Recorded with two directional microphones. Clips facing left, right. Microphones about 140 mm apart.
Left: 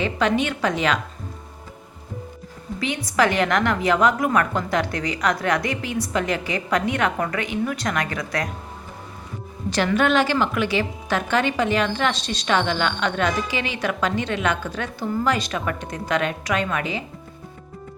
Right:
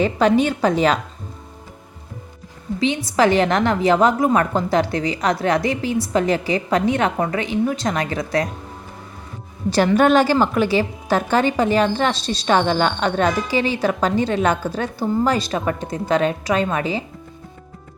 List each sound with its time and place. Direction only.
0.0 s a woman's voice: 35° right (ahead or behind)
3.2 s a woman's voice: 30° right (ahead or behind)
9.7 s a woman's voice: 40° right (ahead or behind)